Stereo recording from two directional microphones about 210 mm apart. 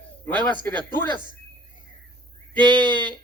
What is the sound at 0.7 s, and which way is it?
Speech, 20° right (ahead or behind).